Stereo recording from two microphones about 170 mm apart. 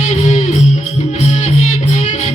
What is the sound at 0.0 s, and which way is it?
Music, 45° left (ahead or behind).